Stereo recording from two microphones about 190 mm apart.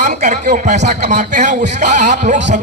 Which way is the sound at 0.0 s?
40° right (ahead or behind).